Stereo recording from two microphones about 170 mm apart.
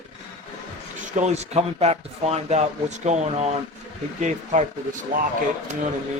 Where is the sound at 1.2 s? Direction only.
40° right (ahead or behind).